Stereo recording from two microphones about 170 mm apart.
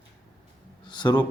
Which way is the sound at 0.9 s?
25° left (ahead or behind).